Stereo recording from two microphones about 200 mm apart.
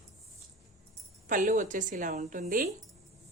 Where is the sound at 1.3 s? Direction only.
40° right (ahead or behind).